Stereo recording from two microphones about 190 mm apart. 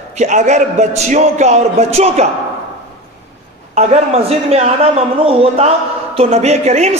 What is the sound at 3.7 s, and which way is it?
A man's voice, 35° right (ahead or behind).